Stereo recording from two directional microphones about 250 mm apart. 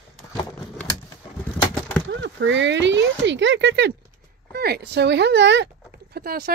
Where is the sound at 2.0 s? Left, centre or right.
Right.